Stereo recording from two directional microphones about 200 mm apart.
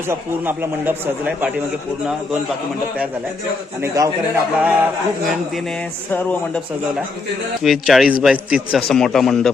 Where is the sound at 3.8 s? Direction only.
15° right (ahead or behind).